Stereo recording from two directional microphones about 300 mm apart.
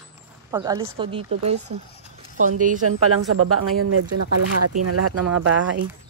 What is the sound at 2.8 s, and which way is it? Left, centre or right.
Speech, right.